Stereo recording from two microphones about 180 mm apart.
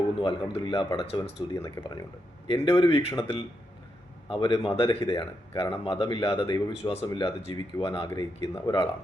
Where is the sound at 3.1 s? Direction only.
30° left (ahead or behind).